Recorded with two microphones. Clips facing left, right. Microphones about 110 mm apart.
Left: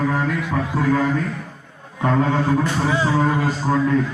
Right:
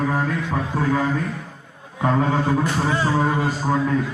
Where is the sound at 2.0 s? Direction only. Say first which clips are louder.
Left 1 dB; 10° right (ahead or behind).